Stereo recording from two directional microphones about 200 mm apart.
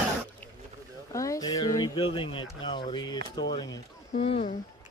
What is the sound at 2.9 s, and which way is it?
Speech, 20° left (ahead or behind).